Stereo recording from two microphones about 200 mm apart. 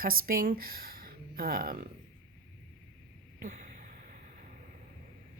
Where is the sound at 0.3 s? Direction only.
45° right (ahead or behind).